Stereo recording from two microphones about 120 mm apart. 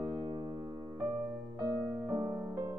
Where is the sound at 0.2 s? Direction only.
30° right (ahead or behind).